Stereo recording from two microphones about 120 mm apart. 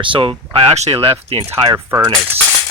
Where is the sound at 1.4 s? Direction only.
25° right (ahead or behind).